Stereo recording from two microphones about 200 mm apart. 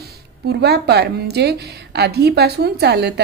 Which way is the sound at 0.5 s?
55° right (ahead or behind).